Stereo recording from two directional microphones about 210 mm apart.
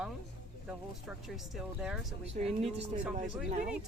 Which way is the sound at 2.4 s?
30° right (ahead or behind).